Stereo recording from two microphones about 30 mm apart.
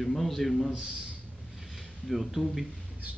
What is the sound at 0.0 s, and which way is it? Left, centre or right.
Speech, centre.